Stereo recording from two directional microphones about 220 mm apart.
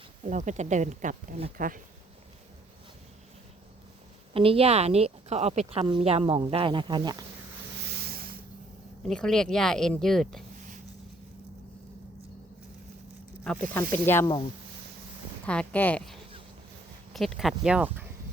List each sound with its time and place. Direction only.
0.3 s speech: 35° right (ahead or behind)
4.4 s speech: 25° right (ahead or behind)
8.0 s a sound: 45° right (ahead or behind)
9.0 s speech: centre (ahead or behind)
13.4 s speech: 5° left (ahead or behind)
15.4 s speech: 5° left (ahead or behind)